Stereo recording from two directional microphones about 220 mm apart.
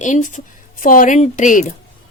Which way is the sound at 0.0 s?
35° left (ahead or behind).